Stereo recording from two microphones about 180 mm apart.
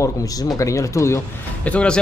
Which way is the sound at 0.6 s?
15° left (ahead or behind).